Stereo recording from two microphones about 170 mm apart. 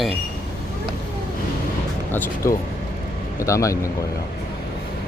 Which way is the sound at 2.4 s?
20° left (ahead or behind).